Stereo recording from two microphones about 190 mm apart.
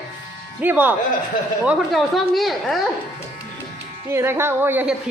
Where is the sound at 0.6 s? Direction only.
10° right (ahead or behind).